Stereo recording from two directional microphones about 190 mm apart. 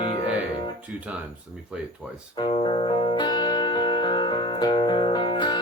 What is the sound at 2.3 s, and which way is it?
Music, 25° left (ahead or behind).